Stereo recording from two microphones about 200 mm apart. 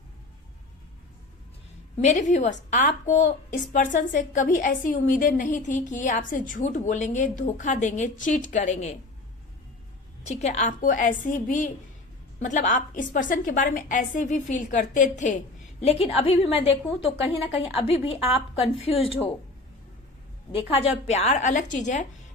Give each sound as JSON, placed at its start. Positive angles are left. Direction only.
{"t": 2.0, "sound": "a woman's voice", "side_deg": 35}
{"t": 10.2, "sound": "a woman's voice", "side_deg": 35}
{"t": 20.5, "sound": "a woman's voice", "side_deg": 30}